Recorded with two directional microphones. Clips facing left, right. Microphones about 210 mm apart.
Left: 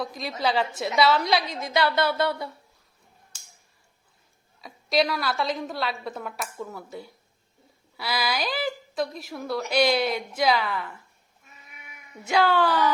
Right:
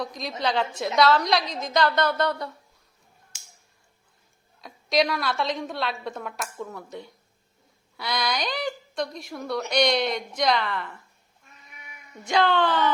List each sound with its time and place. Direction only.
0.0 s a woman's voice: 5° left (ahead or behind)
4.6 s a woman's voice: centre (ahead or behind)
11.4 s cat: 5° left (ahead or behind)